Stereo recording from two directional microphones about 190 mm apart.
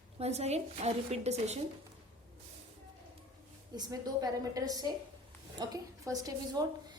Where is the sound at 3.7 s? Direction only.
20° right (ahead or behind).